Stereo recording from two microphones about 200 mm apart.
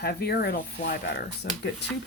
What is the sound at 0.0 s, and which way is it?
Speech, 50° left (ahead or behind).